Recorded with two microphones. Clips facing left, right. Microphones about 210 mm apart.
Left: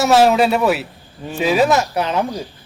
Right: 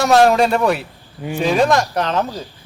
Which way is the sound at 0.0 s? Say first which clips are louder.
Even; 5° left (ahead or behind).